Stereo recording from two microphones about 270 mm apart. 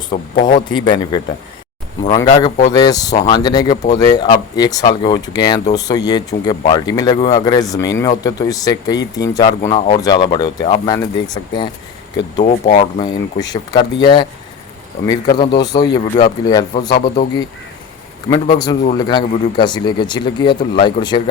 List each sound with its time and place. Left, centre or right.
0.1 s a man's voice: centre
2.2 s a man's voice: left
2.7 s a man's voice: centre
12.4 s a man's voice: left